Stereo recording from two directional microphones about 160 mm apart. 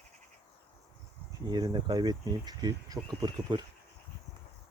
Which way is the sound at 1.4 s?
25° right (ahead or behind).